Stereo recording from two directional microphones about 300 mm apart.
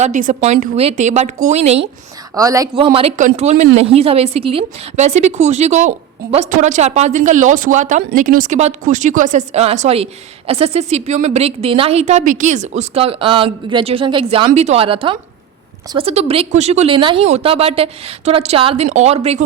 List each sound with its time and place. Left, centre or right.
0.0 s speech: right